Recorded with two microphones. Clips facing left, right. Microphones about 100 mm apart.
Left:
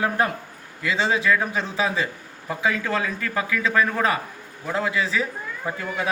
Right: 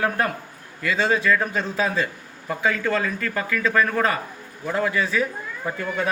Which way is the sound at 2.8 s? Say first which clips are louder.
Right 2 dB; 10° left (ahead or behind).